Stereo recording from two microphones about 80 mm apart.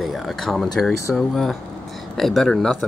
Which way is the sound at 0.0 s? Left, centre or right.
Centre.